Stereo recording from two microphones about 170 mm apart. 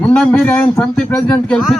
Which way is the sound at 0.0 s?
10° left (ahead or behind).